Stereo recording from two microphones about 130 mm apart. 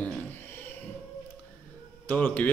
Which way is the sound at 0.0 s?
15° left (ahead or behind).